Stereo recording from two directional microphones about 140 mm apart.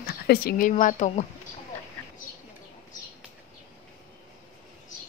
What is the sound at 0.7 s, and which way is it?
Speech, 60° left (ahead or behind).